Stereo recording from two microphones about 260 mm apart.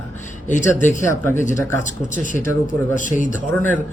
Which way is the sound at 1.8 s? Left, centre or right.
Left.